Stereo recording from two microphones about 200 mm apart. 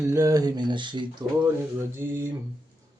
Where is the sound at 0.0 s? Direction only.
15° right (ahead or behind).